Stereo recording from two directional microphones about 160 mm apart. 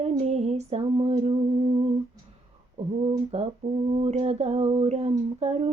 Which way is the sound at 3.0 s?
40° right (ahead or behind).